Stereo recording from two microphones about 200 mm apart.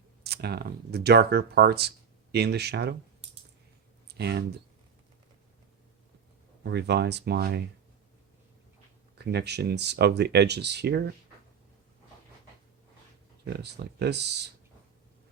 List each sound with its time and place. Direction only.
0.2 s speech: 55° right (ahead or behind)
4.0 s a sound: 55° right (ahead or behind)
6.6 s speech: 55° right (ahead or behind)
9.1 s speech: 55° right (ahead or behind)
13.4 s speech: 55° right (ahead or behind)